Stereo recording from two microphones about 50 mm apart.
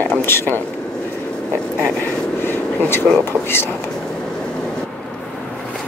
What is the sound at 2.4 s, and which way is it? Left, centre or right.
Air conditioning, left.